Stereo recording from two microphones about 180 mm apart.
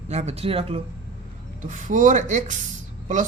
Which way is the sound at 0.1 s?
35° right (ahead or behind).